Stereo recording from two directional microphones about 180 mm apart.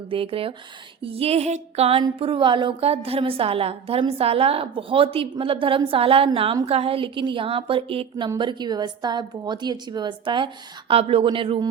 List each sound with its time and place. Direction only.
0.1 s a woman's voice: 30° right (ahead or behind)